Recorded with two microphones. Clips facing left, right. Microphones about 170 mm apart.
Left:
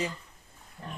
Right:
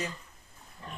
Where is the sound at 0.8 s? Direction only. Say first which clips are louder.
Left 3 dB; 50° left (ahead or behind).